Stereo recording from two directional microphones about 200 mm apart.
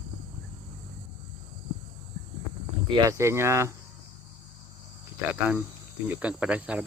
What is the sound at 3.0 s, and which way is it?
Speech, 15° right (ahead or behind).